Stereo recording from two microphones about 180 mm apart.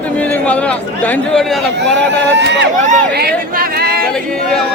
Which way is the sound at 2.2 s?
75° right (ahead or behind).